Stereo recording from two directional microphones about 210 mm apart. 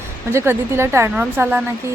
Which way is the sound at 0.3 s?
10° right (ahead or behind).